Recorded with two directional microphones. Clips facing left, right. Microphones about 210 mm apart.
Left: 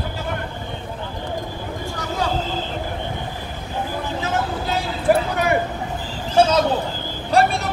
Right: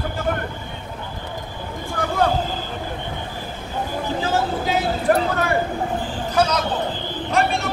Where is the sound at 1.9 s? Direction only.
55° right (ahead or behind).